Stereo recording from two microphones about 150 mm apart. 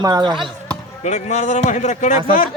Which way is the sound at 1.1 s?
50° left (ahead or behind).